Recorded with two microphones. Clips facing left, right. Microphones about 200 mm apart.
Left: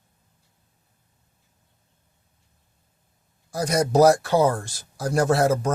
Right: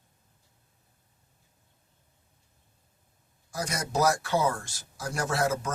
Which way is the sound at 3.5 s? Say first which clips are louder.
Left 10 dB; 35° left (ahead or behind).